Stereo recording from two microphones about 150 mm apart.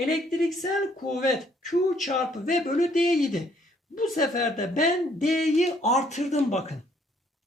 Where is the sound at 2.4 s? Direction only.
55° left (ahead or behind).